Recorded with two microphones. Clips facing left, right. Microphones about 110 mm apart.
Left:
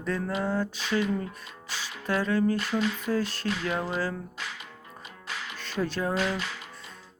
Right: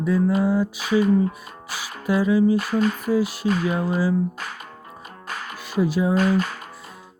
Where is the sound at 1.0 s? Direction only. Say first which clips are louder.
Right 10 dB; 45° right (ahead or behind).